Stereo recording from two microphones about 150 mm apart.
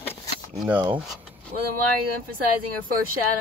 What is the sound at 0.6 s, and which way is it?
Speech, 10° right (ahead or behind).